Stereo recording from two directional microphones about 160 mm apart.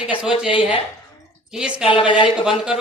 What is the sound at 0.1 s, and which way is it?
Speech, 5° right (ahead or behind).